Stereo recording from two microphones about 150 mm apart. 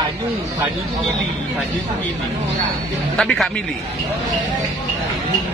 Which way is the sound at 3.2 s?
Centre (ahead or behind).